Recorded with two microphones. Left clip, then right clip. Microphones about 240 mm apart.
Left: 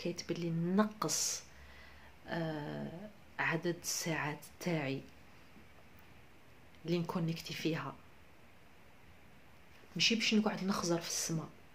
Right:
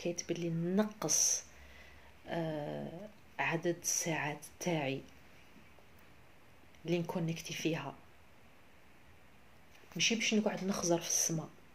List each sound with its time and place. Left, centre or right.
0.2 s speech: centre
6.9 s speech: centre
9.9 s speech: centre